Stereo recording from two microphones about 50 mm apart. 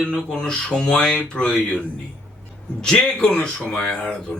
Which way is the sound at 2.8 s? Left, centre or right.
Centre.